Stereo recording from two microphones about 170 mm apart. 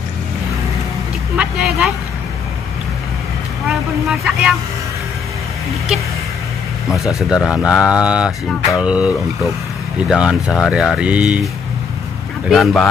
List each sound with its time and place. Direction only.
1.3 s vehicle: 5° right (ahead or behind)
3.6 s vehicle: 5° right (ahead or behind)
6.9 s speech: 20° left (ahead or behind)
7.2 s speech: 5° right (ahead or behind)
12.4 s speech: centre (ahead or behind)